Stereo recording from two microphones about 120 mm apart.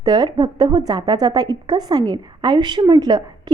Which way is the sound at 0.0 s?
40° right (ahead or behind).